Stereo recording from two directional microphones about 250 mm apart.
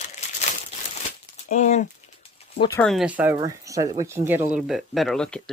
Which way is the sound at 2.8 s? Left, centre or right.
Centre.